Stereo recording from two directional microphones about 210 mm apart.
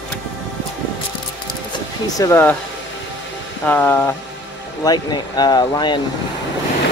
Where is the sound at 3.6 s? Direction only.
10° left (ahead or behind).